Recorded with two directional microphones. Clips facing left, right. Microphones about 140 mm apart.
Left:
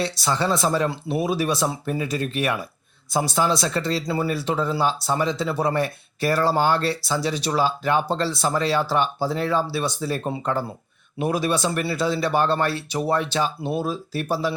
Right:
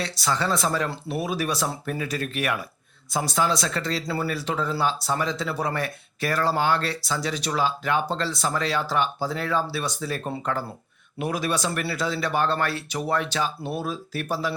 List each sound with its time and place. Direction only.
0.0 s speech: 30° left (ahead or behind)
4.0 s speech: 15° left (ahead or behind)
4.4 s speech: 30° left (ahead or behind)